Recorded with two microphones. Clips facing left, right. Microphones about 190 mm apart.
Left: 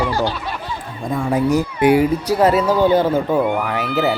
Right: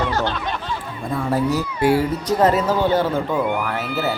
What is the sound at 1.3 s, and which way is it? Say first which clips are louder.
Speech: left 4 dB; 15° left (ahead or behind).